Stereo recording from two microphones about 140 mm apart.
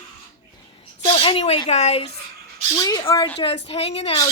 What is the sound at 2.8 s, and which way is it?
A woman's voice, 30° left (ahead or behind).